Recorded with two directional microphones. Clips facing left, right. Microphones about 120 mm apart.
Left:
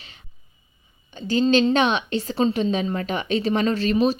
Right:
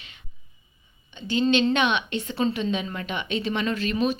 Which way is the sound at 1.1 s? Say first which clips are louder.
Left 3 dB; 40° left (ahead or behind).